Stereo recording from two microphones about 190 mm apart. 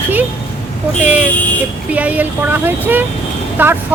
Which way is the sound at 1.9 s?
10° right (ahead or behind).